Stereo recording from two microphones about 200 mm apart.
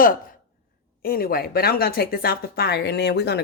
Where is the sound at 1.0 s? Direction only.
45° left (ahead or behind).